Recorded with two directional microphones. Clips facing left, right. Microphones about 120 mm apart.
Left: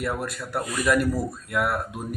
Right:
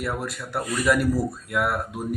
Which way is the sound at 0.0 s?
Centre (ahead or behind).